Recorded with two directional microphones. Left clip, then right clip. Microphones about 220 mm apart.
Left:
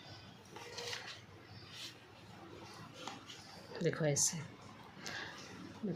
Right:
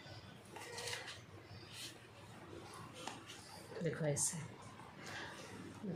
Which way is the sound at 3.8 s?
50° left (ahead or behind).